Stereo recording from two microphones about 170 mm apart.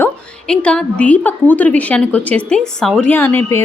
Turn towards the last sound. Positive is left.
turn(degrees=15)  # may be behind; listen again after turning